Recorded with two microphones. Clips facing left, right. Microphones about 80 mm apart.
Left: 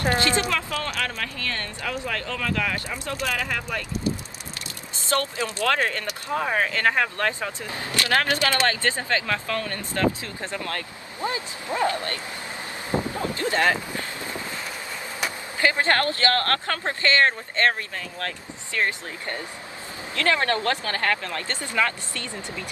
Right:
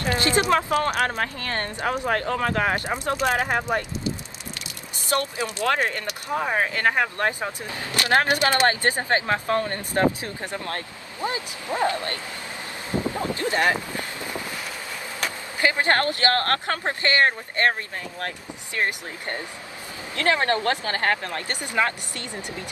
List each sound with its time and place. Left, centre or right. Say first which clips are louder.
0.2 s speech: right 3 dB; right
5.1 s speech: even; right
13.0 s boat: right 1 dB; right
15.6 s speech: even; right
18.8 s speech: even; right